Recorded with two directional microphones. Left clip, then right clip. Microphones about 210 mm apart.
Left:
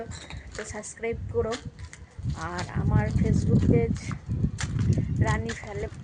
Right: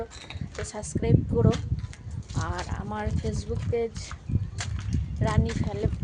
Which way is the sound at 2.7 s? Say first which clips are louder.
Left 2 dB; 15° right (ahead or behind).